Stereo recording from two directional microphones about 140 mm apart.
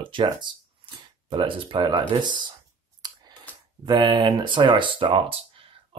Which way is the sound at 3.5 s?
10° left (ahead or behind).